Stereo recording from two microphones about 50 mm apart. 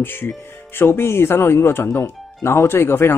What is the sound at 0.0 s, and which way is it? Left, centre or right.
Speech, left.